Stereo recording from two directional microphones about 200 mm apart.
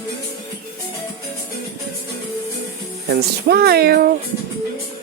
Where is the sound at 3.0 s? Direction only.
50° right (ahead or behind).